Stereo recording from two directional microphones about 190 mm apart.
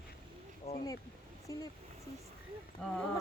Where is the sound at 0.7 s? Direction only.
35° left (ahead or behind).